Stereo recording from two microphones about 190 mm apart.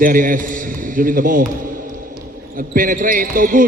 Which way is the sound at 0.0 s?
45° right (ahead or behind).